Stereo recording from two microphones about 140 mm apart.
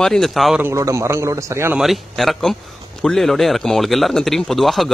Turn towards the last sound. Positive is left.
turn(degrees=0)  # may be behind; listen again after turning